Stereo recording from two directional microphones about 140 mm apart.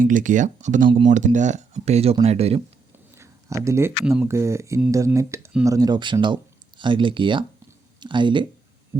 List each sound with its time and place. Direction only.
0.0 s speech: 70° right (ahead or behind)
0.9 s speech: 35° right (ahead or behind)
1.1 s speech: 60° right (ahead or behind); by 2.6 s 45° right (ahead or behind)
3.2 s a sound: 20° right (ahead or behind)
4.3 s speech: 20° right (ahead or behind)